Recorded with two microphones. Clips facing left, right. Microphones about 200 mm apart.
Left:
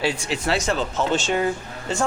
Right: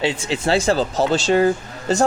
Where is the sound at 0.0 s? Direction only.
25° right (ahead or behind).